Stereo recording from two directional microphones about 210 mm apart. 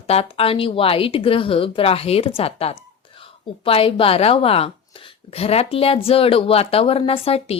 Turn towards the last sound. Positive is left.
turn(degrees=30)  # may be behind; listen again after turning